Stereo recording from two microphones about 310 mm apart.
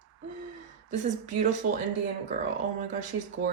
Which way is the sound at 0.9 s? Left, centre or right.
Right.